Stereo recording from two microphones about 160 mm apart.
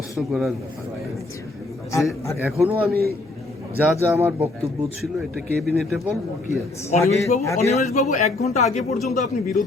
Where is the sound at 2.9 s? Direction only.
75° right (ahead or behind).